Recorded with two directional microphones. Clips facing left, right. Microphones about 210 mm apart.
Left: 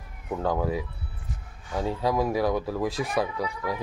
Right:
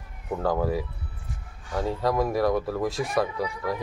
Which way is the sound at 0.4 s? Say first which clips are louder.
Right 1 dB; centre (ahead or behind).